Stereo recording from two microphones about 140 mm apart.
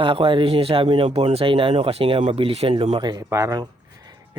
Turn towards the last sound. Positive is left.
turn(degrees=-30)  # may be behind; listen again after turning